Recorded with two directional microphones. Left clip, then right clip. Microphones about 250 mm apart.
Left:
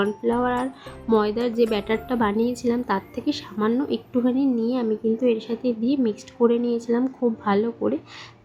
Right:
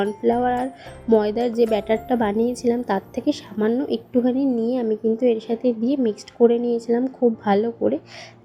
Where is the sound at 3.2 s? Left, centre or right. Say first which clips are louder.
Right 3 dB; left.